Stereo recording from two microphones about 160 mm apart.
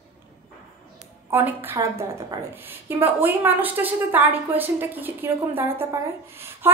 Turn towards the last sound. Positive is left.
turn(degrees=-15)  # may be behind; listen again after turning